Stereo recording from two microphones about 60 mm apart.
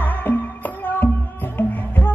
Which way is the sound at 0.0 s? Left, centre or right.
Left.